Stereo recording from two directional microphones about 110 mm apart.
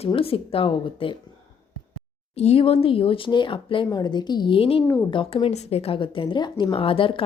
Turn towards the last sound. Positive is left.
turn(degrees=50)  # may be behind; listen again after turning